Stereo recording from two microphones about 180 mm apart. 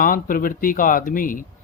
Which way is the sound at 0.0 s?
50° left (ahead or behind).